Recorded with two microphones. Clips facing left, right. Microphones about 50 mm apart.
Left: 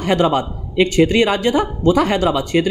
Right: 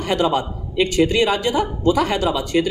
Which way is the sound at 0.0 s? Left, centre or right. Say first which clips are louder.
Left 3 dB; left.